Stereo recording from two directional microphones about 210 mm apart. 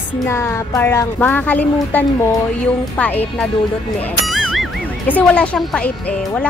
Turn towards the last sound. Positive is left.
turn(degrees=5)  # may be behind; listen again after turning